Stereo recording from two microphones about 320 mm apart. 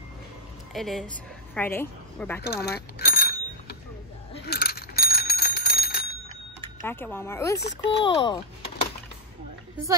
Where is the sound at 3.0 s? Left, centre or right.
Left.